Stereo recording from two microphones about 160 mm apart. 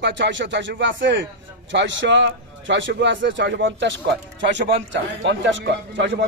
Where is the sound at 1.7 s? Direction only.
90° right.